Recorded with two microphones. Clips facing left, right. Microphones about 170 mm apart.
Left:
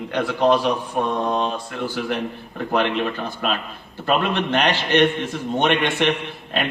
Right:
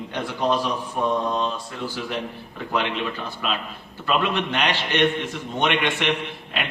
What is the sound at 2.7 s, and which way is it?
A man's voice, 55° left (ahead or behind).